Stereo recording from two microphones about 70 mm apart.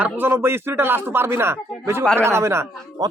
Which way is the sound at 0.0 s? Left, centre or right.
Right.